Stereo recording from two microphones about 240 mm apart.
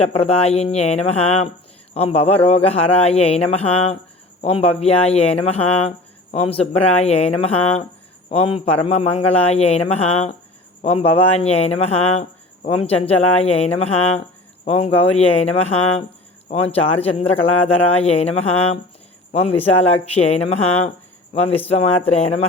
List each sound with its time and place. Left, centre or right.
0.0 s speech: left